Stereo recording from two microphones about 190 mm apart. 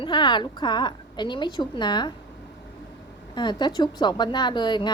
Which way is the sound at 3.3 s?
25° left (ahead or behind).